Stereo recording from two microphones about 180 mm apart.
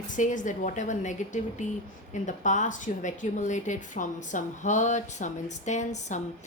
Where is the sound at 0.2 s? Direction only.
45° left (ahead or behind).